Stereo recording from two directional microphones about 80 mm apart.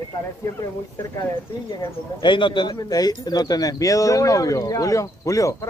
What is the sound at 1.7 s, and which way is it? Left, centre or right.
Speech, left.